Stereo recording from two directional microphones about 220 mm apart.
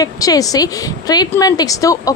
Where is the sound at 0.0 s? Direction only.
15° left (ahead or behind).